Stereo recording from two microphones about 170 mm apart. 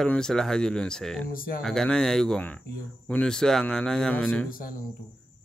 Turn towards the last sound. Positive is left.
turn(degrees=55)  # may be behind; listen again after turning